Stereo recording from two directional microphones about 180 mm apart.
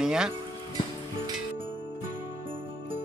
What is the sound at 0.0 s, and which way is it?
Speech, 5° right (ahead or behind).